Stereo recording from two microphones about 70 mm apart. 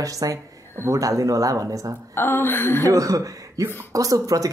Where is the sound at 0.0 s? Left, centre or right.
Right.